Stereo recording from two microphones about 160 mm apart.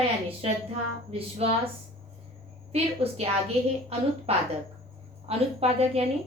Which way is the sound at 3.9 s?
40° right (ahead or behind).